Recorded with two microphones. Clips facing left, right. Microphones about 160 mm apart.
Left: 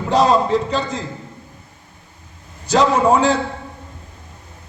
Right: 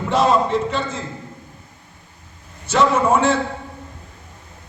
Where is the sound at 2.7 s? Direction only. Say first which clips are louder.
Left 2 dB; 35° left (ahead or behind).